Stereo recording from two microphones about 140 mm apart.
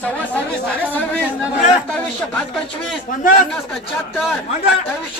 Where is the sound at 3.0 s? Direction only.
70° left (ahead or behind).